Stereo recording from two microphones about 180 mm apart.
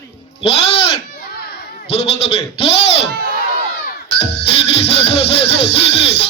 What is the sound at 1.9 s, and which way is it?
Music, 35° left (ahead or behind).